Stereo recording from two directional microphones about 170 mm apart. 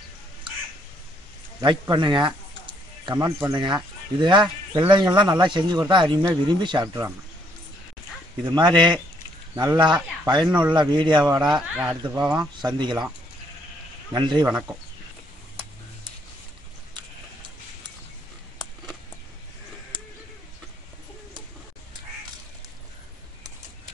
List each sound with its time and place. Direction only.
1.6 s a sound: 25° right (ahead or behind)
3.3 s speech: 15° right (ahead or behind)
3.5 s speech: 25° right (ahead or behind)
8.5 s speech: 25° right (ahead or behind)
9.8 s speech: 25° right (ahead or behind)
11.4 s speech: 5° right (ahead or behind)
11.9 s speech: 25° right (ahead or behind)
14.1 s speech: 25° right (ahead or behind)